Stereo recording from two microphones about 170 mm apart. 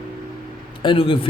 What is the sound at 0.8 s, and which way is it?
Speech, 30° left (ahead or behind).